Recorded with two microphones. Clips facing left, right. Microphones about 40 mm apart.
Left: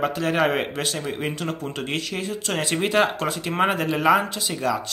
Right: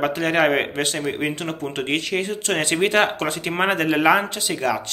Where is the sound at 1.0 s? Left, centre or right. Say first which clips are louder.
Right 4 dB; right.